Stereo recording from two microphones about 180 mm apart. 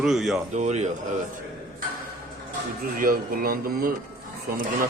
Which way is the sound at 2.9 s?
55° right (ahead or behind).